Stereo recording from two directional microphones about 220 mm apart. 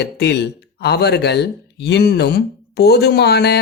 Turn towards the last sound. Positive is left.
turn(degrees=50)  # may be behind; listen again after turning